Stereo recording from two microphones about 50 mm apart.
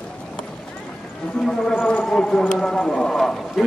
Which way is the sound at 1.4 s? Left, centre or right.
Centre.